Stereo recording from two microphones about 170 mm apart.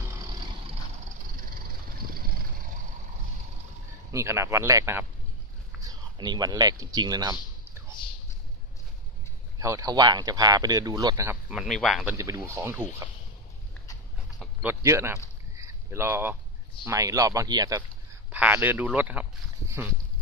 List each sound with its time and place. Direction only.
2.1 s vehicle: 55° right (ahead or behind)
4.1 s a man's voice: 15° right (ahead or behind)
9.6 s speech: 20° right (ahead or behind)
11.5 s speech: centre (ahead or behind)
12.2 s a man's voice: 15° right (ahead or behind)
14.6 s a man's voice: 15° right (ahead or behind)
15.5 s a sound: 15° right (ahead or behind)
16.8 s speech: 20° right (ahead or behind)
18.3 s a man's voice: 10° right (ahead or behind)